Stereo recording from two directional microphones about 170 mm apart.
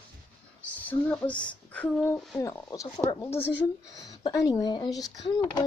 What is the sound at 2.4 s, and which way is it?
Speech, 20° left (ahead or behind).